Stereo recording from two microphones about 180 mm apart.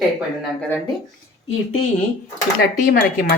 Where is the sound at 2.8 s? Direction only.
55° left (ahead or behind).